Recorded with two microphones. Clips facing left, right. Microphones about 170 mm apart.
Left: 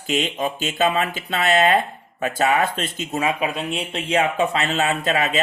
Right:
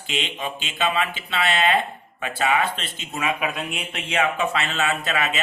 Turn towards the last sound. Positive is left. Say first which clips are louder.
# left 3 dB
turn(degrees=35)  # may be behind; listen again after turning